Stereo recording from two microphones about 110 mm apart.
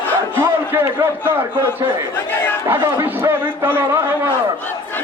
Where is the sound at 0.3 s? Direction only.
20° right (ahead or behind).